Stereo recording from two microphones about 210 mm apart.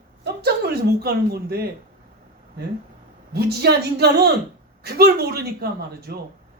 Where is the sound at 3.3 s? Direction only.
50° right (ahead or behind).